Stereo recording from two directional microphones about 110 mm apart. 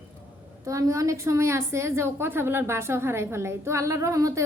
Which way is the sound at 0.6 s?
30° right (ahead or behind).